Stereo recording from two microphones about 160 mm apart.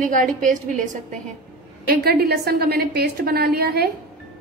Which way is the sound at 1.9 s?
80° right.